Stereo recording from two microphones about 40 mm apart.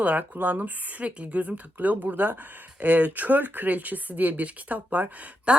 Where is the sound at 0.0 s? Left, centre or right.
Right.